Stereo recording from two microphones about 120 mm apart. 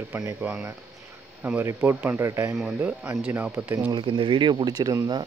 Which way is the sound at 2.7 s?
15° right (ahead or behind).